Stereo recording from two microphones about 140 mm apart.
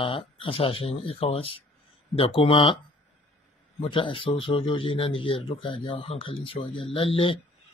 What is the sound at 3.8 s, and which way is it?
Speech, 35° left (ahead or behind).